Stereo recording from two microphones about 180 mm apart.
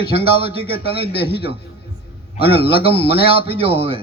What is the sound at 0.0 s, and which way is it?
Speech, 35° right (ahead or behind).